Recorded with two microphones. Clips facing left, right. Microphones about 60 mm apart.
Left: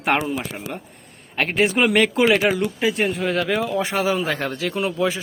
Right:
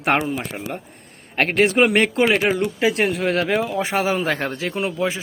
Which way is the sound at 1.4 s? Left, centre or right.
Right.